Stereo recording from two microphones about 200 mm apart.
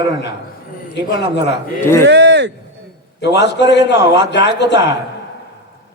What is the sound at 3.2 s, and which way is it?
A man's voice, 60° left (ahead or behind).